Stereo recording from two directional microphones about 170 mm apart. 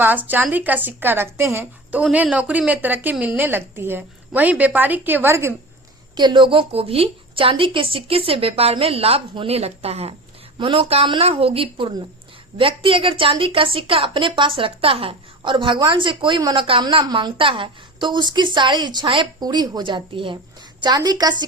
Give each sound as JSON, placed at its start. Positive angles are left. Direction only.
{"t": 0.0, "sound": "a woman's voice", "side_deg": -10}
{"t": 6.1, "sound": "a woman's voice", "side_deg": -25}